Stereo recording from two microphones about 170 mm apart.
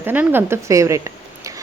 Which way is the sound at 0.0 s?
10° right (ahead or behind).